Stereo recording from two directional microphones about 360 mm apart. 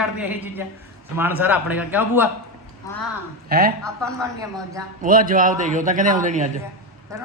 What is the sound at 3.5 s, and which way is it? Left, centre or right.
Speech, right.